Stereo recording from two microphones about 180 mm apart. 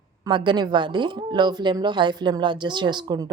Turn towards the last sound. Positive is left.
turn(degrees=-25)  # may be behind; listen again after turning